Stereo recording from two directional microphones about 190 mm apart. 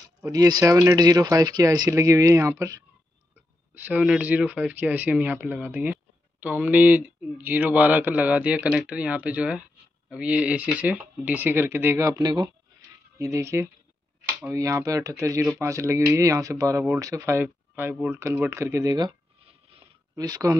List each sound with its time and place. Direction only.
0.2 s a man's voice: 20° right (ahead or behind)
20.2 s speech: 20° right (ahead or behind)